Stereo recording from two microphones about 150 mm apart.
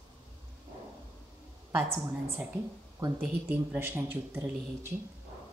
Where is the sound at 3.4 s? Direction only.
15° right (ahead or behind).